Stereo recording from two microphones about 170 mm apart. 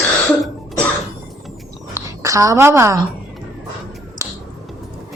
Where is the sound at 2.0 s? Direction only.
20° right (ahead or behind).